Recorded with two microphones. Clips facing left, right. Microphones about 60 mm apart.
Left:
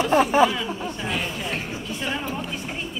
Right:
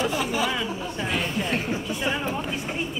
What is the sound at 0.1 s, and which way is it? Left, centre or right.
Speech, left.